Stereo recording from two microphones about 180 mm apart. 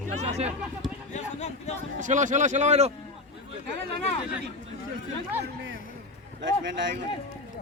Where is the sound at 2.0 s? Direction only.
45° right (ahead or behind).